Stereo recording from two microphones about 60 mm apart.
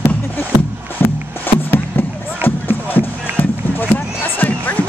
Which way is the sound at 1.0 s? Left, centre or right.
Left.